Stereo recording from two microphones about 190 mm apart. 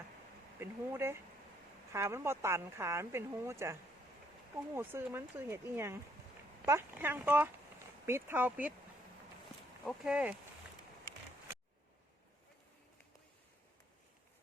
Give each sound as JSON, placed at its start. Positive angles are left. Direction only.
{"t": 0.6, "sound": "speech", "side_deg": -15}
{"t": 9.8, "sound": "speech", "side_deg": 0}